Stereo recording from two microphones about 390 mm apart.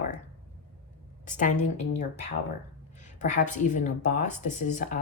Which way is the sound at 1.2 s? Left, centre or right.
Centre.